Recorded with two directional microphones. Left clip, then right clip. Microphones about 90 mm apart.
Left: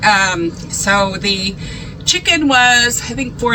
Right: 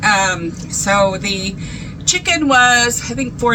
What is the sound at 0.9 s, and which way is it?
A woman's voice, 45° right (ahead or behind).